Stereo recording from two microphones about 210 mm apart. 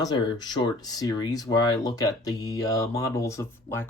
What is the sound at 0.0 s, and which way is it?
Speech, 20° left (ahead or behind).